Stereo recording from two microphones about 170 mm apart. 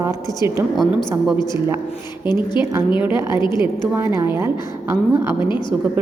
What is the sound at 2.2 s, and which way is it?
Speech, 25° left (ahead or behind).